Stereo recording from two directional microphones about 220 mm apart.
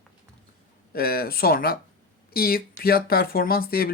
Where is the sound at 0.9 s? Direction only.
45° left (ahead or behind).